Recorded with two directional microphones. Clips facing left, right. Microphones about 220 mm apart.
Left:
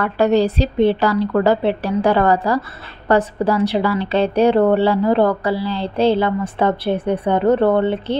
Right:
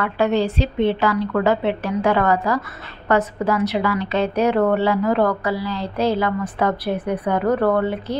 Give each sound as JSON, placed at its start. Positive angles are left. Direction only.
{"t": 0.0, "sound": "a woman's voice", "side_deg": 40}